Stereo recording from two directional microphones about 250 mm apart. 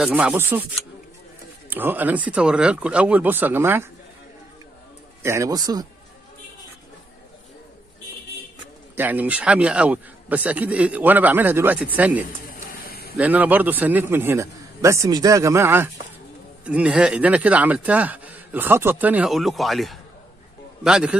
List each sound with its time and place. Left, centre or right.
0.0 s a man's voice: centre
5.2 s a man's voice: centre
8.9 s a man's voice: centre
12.4 s a sound: left
13.2 s a man's voice: centre